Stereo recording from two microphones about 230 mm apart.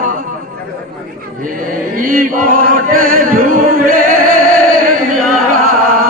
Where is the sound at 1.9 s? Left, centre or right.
Right.